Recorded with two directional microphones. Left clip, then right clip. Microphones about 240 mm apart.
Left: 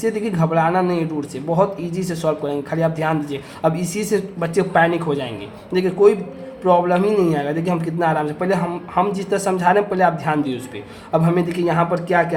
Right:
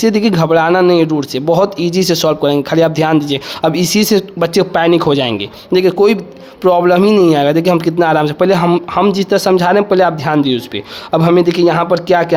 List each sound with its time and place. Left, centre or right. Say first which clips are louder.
0.0 s speech: right 8 dB; right